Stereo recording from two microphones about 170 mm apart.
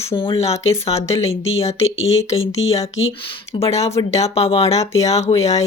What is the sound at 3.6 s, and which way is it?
Speech, 40° left (ahead or behind).